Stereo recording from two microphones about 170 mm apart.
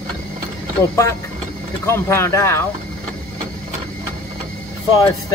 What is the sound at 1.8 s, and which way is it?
Speech, 15° left (ahead or behind).